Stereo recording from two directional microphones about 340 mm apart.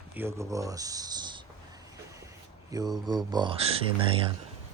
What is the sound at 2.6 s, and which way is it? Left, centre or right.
Speech, centre.